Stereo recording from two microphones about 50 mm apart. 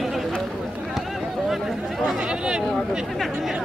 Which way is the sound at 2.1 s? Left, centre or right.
Centre.